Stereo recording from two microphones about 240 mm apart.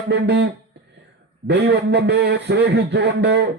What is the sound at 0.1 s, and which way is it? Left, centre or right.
A man's voice, right.